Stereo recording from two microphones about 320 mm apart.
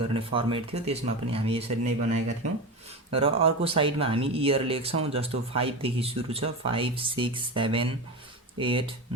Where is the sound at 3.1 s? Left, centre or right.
Centre.